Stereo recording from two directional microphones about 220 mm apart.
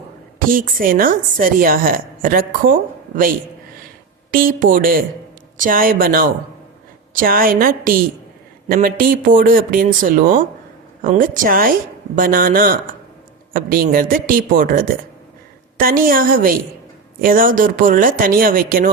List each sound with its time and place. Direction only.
0.3 s a woman's voice: 40° right (ahead or behind)